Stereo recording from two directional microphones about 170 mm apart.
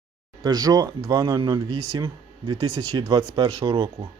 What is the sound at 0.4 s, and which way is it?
A man's voice, 20° right (ahead or behind).